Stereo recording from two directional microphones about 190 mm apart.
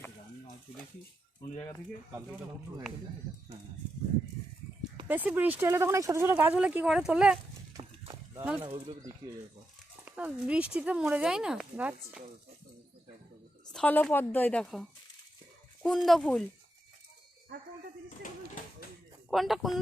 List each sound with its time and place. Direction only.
5.0 s speech: 10° right (ahead or behind)
7.8 s horse: 25° right (ahead or behind)
8.4 s speech: 10° right (ahead or behind)
8.6 s speech: 25° right (ahead or behind)
10.1 s speech: 5° right (ahead or behind)
13.7 s a woman's voice: 10° left (ahead or behind)
19.3 s speech: centre (ahead or behind)